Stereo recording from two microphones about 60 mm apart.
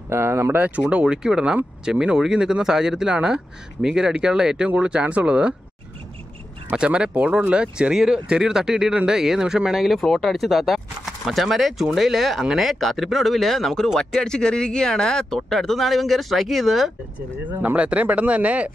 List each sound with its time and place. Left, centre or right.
0.1 s speech: right
0.6 s speech: right
6.7 s speech: centre
17.5 s speech: right